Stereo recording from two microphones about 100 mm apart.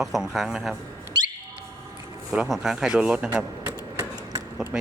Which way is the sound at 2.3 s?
5° right (ahead or behind).